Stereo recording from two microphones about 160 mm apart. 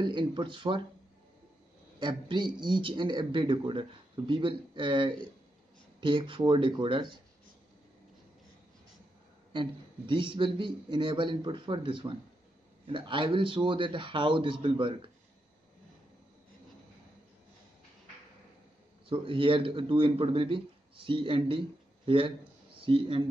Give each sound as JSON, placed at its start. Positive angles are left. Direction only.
{"t": 0.0, "sound": "a man's voice", "side_deg": -30}
{"t": 2.0, "sound": "a man's voice", "side_deg": -30}
{"t": 9.5, "sound": "a man's voice", "side_deg": -30}
{"t": 19.0, "sound": "a man's voice", "side_deg": -35}